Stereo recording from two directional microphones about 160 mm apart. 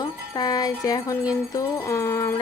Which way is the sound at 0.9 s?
25° left (ahead or behind).